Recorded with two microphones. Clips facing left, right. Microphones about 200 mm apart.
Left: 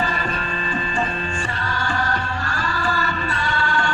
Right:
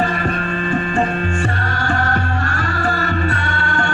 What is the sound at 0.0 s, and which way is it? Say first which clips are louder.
Music: right 5 dB; 55° right (ahead or behind).